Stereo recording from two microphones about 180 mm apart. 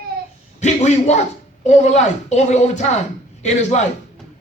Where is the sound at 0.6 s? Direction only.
40° left (ahead or behind).